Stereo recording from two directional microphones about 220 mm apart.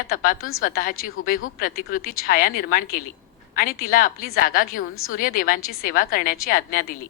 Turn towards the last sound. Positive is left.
turn(degrees=40)  # may be behind; listen again after turning